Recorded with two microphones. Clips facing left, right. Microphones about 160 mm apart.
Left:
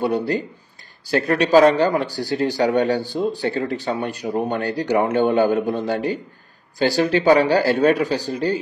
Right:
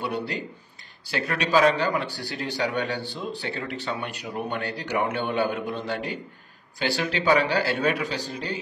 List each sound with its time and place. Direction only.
1.0 s speech: 40° left (ahead or behind)